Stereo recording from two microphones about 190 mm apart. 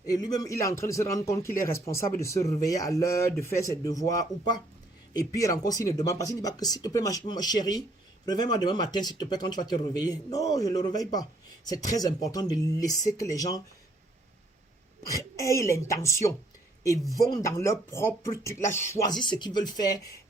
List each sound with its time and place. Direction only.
0.0 s speech: 20° left (ahead or behind)
15.1 s speech: 15° left (ahead or behind)